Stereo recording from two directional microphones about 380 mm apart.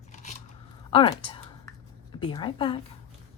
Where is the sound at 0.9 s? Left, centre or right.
Centre.